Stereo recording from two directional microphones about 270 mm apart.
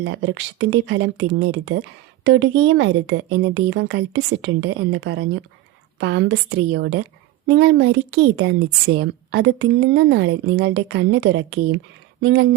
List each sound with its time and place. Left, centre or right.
0.0 s a woman's voice: right